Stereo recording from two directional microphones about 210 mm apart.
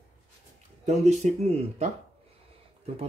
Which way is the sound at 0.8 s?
35° right (ahead or behind).